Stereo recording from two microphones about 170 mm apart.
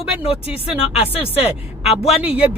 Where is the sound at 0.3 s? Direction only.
35° left (ahead or behind).